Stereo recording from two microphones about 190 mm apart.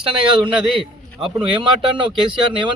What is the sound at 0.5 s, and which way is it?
Speech, centre (ahead or behind).